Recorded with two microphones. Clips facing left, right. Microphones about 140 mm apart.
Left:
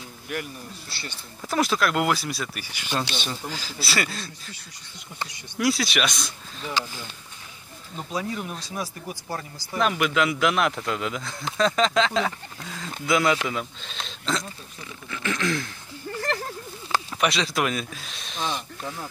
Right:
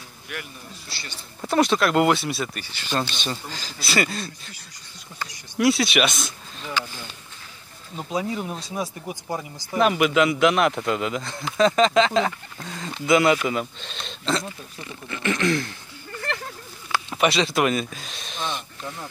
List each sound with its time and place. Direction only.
1.5 s speech: centre (ahead or behind)
2.6 s speech: 10° left (ahead or behind)
5.6 s speech: centre (ahead or behind)
8.1 s speech: 20° right (ahead or behind)
9.8 s speech: 5° right (ahead or behind)
16.2 s a sound: 35° left (ahead or behind)
17.2 s speech: centre (ahead or behind)